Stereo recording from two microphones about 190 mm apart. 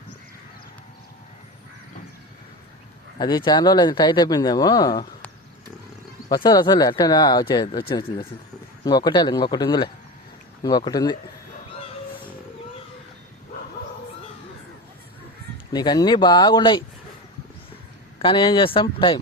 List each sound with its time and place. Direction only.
3.2 s speech: 20° left (ahead or behind)
6.3 s speech: 20° left (ahead or behind)
15.7 s speech: 20° left (ahead or behind)
18.2 s speech: 25° left (ahead or behind)